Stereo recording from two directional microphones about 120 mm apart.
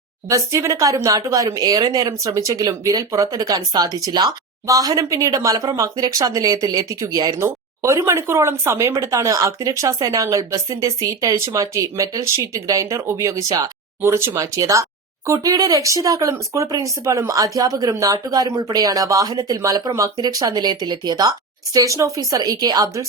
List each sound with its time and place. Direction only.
0.3 s speech: 25° right (ahead or behind)